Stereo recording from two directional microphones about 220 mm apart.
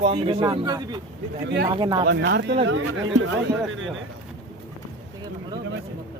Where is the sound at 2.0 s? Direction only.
50° right (ahead or behind).